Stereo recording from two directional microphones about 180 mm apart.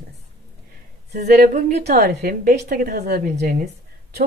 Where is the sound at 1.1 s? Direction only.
60° right (ahead or behind).